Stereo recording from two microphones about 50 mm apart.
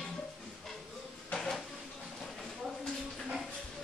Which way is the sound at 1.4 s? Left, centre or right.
Centre.